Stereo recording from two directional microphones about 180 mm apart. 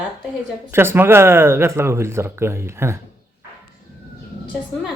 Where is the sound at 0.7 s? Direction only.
15° right (ahead or behind).